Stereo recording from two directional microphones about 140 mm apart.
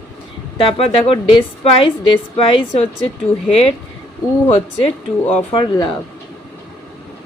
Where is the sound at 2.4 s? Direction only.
40° left (ahead or behind).